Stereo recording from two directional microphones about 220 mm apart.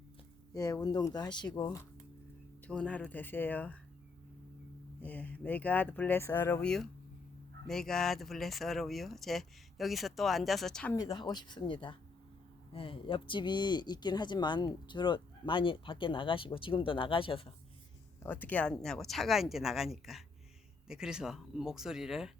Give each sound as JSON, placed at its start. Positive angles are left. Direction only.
{"t": 0.5, "sound": "speech", "side_deg": 15}
{"t": 2.6, "sound": "speech", "side_deg": 5}
{"t": 5.0, "sound": "speech", "side_deg": 5}
{"t": 10.9, "sound": "speech", "side_deg": 20}
{"t": 18.2, "sound": "speech", "side_deg": 10}